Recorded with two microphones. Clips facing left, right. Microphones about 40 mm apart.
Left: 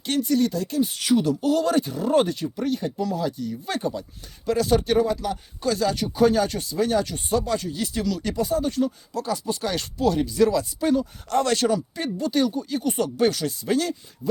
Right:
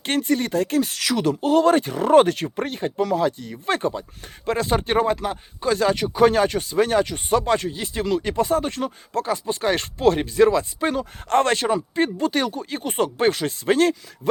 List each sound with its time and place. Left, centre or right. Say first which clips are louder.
0.0 s speech: even; right
0.8 s speech: left 1 dB; right
1.2 s speech: right 4 dB; right
7.7 s speech: right 3 dB; right
8.4 s speech: right 2 dB; right
9.2 s speech: right 3 dB; right
11.5 s speech: right 2 dB; right